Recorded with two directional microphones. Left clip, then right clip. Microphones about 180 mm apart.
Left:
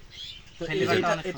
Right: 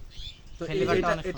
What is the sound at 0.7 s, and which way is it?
Speech, 10° right (ahead or behind).